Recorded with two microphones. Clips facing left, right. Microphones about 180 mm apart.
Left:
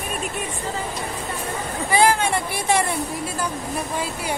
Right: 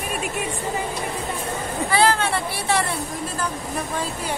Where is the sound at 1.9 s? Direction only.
15° left (ahead or behind).